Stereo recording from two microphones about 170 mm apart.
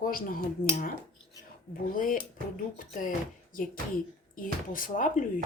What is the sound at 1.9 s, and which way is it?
Speech, 55° left (ahead or behind).